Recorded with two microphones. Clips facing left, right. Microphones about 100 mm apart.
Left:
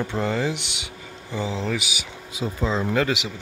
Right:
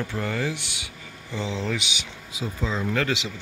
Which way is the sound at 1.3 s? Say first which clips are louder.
Left 2 dB; 5° left (ahead or behind).